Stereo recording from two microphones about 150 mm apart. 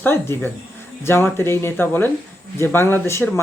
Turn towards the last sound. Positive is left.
turn(degrees=15)  # may be behind; listen again after turning